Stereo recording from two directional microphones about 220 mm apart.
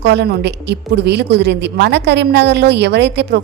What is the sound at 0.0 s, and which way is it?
A woman's voice, 50° right (ahead or behind).